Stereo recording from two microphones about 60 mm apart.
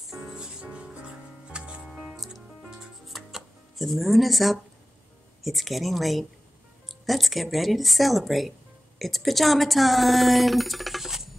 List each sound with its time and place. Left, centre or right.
0.2 s music: centre
5.4 s speech: centre